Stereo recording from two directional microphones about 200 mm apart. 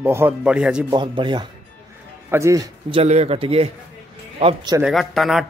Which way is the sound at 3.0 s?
30° right (ahead or behind).